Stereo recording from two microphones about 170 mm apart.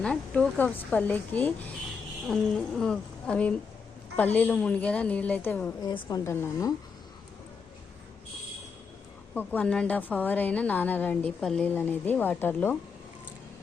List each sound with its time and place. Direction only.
0.0 s a woman's voice: 5° left (ahead or behind)
5.8 s a woman's voice: 25° left (ahead or behind)
9.3 s a woman's voice: 10° left (ahead or behind)